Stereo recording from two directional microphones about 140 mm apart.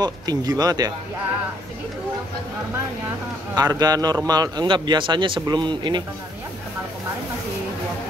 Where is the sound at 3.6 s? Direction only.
25° right (ahead or behind).